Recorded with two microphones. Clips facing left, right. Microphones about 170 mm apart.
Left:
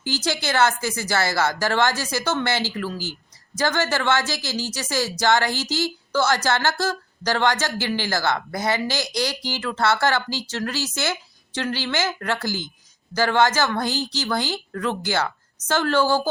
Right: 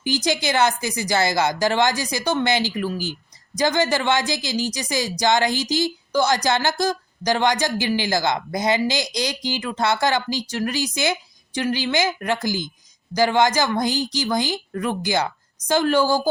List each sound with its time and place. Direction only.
0.0 s speech: 15° right (ahead or behind)